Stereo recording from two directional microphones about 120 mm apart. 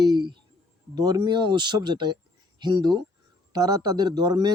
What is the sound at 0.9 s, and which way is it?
A man's voice, 35° right (ahead or behind).